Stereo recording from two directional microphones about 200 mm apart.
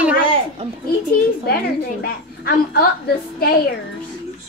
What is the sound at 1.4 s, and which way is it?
A woman's voice, 50° left (ahead or behind).